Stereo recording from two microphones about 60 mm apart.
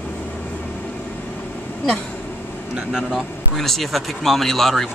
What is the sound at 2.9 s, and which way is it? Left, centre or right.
Speech, centre.